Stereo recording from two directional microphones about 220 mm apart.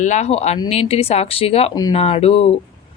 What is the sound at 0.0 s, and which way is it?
Speech, 30° left (ahead or behind).